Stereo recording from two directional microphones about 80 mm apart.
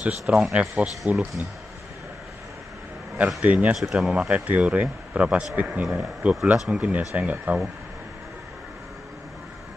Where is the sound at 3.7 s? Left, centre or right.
Centre.